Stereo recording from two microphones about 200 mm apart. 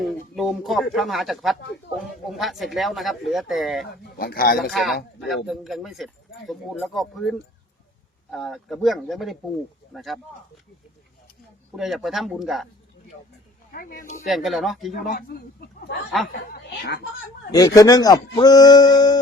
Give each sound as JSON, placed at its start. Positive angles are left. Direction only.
{"t": 0.3, "sound": "speech", "side_deg": 0}
{"t": 3.8, "sound": "a man's voice", "side_deg": 50}
{"t": 4.7, "sound": "speech", "side_deg": 0}
{"t": 11.8, "sound": "speech", "side_deg": 0}
{"t": 13.7, "sound": "a man's voice", "side_deg": 45}
{"t": 14.3, "sound": "speech", "side_deg": 0}
{"t": 15.3, "sound": "a man's voice", "side_deg": 45}
{"t": 17.5, "sound": "speech", "side_deg": 20}